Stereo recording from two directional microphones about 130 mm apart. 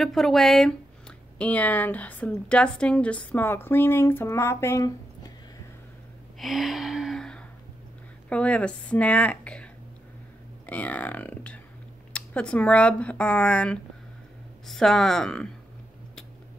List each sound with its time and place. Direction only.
0.0 s speech: centre (ahead or behind); by 5.3 s 25° left (ahead or behind)
6.4 s gasp: centre (ahead or behind)
8.3 s speech: 10° left (ahead or behind)
10.7 s speech: 10° left (ahead or behind)